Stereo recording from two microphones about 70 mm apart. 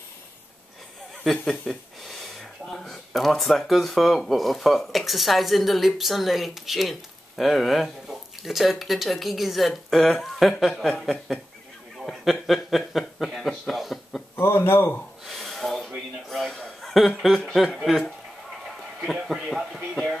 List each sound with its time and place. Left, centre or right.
1.2 s speech: centre
14.4 s a man's voice: left
15.2 s a sound: centre
16.3 s speech: centre
19.2 s speech: centre